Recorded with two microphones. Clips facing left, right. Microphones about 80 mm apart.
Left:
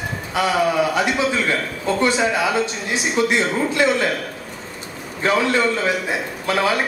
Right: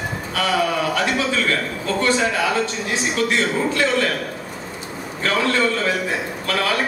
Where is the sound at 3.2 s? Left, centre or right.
Centre.